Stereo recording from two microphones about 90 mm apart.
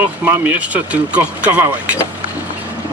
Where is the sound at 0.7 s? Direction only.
15° right (ahead or behind).